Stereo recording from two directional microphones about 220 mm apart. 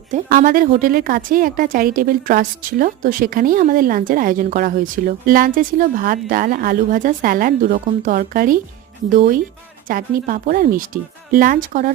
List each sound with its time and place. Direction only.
0.1 s a woman's voice: 35° right (ahead or behind)